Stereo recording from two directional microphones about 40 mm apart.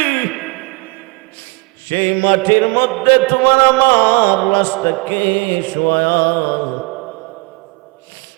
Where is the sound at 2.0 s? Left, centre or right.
Left.